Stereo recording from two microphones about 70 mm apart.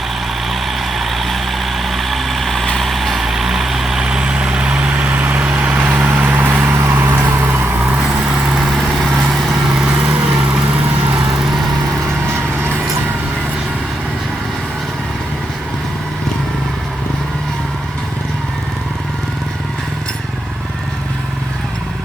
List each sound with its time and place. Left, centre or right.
0.9 s vehicle: centre; by 6.7 s right
6.7 s vehicle: right
9.7 s vehicle: centre